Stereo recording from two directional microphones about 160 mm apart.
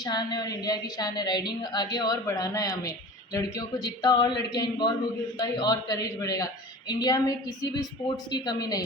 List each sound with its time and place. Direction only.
0.0 s a woman's voice: 25° left (ahead or behind)